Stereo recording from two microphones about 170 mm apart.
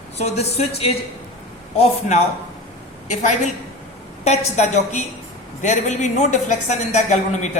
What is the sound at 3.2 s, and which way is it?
A woman's voice, 45° left (ahead or behind).